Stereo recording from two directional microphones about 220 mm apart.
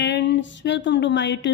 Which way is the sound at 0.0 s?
55° left (ahead or behind).